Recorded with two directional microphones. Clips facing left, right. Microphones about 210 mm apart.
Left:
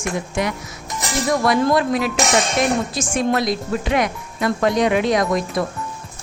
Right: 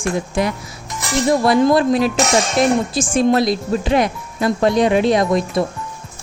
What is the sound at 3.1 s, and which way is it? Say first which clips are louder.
Speech: right 5 dB; 30° right (ahead or behind).